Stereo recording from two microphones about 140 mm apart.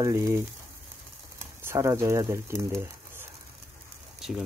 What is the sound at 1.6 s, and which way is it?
Speech, 20° right (ahead or behind).